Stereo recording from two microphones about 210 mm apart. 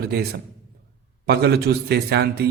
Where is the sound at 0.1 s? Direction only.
50° right (ahead or behind).